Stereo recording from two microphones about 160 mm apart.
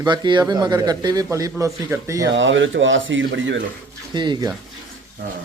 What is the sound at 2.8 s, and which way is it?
Speech, 90° right.